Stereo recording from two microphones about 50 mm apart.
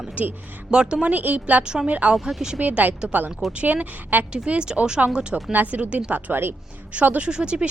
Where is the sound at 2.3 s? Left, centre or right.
Centre.